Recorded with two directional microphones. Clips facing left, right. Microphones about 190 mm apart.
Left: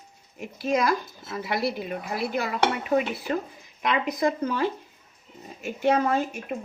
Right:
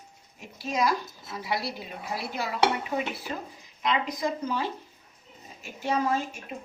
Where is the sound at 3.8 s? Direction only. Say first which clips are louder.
Left 4 dB; 60° left (ahead or behind).